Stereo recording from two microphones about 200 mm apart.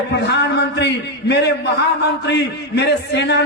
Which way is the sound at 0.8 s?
60° left (ahead or behind).